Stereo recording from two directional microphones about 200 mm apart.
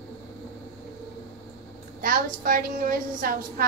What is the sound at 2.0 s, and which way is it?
A woman's voice, 45° right (ahead or behind).